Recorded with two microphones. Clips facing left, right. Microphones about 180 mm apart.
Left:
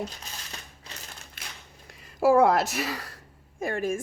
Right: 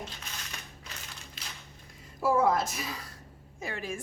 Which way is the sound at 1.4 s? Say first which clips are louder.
Left 2 dB; 60° left (ahead or behind).